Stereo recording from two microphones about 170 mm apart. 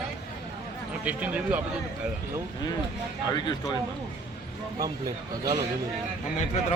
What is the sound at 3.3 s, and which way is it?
Speech, 25° left (ahead or behind).